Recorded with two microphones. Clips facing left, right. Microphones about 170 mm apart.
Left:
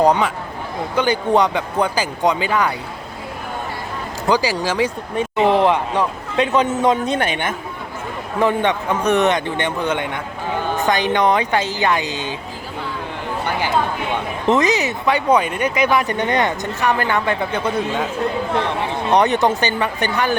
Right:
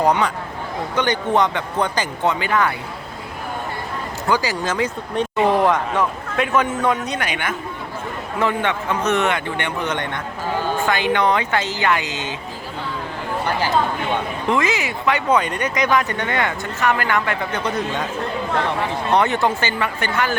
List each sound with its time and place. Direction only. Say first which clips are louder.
0.0 s speech: left 2 dB; 15° left (ahead or behind)
4.3 s speech: left 3 dB; 15° left (ahead or behind)
5.4 s a man's voice: left 2 dB; 20° left (ahead or behind)
14.4 s speech: left 6 dB; 20° left (ahead or behind)
17.7 s speech: left 3 dB; 5° left (ahead or behind)
19.1 s speech: left 3 dB; 20° left (ahead or behind)